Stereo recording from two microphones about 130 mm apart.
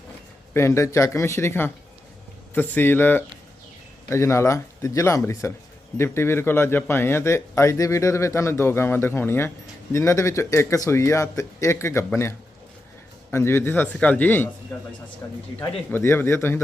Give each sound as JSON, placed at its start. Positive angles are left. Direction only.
{"t": 0.5, "sound": "a man's voice", "side_deg": 20}
{"t": 13.3, "sound": "a man's voice", "side_deg": 20}
{"t": 15.9, "sound": "a man's voice", "side_deg": 20}